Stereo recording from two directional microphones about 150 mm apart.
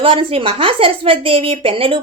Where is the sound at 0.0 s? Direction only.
35° right (ahead or behind).